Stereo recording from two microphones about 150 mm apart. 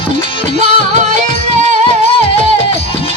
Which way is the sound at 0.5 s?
55° right (ahead or behind).